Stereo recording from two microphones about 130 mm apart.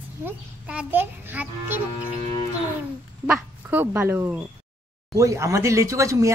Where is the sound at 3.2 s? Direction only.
15° right (ahead or behind).